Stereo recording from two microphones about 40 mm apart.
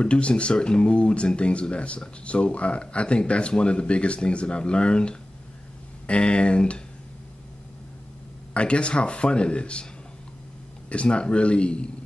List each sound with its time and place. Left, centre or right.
0.0 s speech: left
8.5 s speech: left
10.9 s speech: left